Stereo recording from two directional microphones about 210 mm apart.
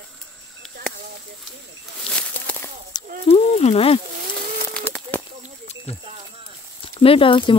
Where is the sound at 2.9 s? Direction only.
20° left (ahead or behind).